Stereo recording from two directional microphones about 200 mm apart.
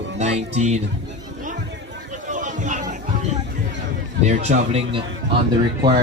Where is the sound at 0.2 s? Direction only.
35° right (ahead or behind).